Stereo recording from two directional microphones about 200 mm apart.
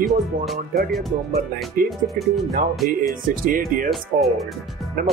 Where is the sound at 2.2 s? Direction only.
45° right (ahead or behind).